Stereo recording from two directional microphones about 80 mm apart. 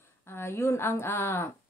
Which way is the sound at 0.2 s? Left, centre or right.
Left.